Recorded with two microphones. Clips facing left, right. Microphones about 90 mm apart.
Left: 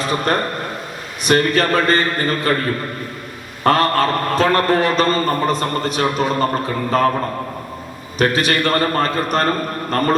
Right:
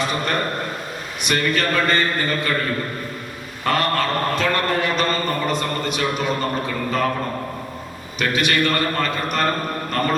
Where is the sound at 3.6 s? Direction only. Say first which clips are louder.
Left 5 dB; 40° left (ahead or behind).